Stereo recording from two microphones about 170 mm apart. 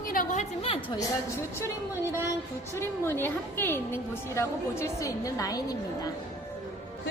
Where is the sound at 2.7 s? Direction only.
15° left (ahead or behind).